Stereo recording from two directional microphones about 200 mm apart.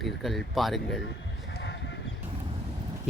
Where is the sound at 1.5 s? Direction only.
60° left (ahead or behind).